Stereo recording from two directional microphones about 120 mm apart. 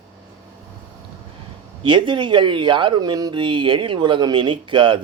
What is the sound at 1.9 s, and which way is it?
Speech, 40° right (ahead or behind).